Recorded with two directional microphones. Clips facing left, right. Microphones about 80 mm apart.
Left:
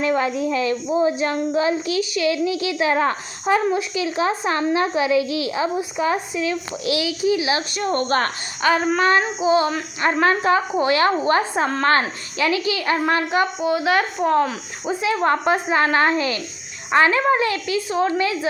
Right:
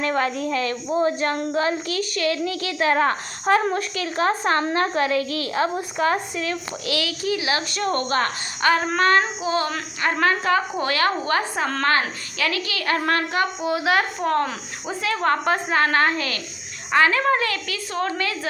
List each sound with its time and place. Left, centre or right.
0.2 s a woman's voice: centre
1.2 s speech: right
2.1 s a woman's voice: centre
3.4 s a woman's voice: centre
4.2 s speech: right
4.6 s a woman's voice: centre
8.0 s a woman's voice: left
8.6 s a woman's voice: centre
10.0 s a woman's voice: left
13.6 s a woman's voice: centre